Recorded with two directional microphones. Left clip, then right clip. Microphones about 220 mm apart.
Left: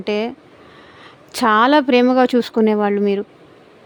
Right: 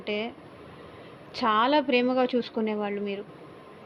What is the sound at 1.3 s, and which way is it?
A woman's voice, 55° left (ahead or behind).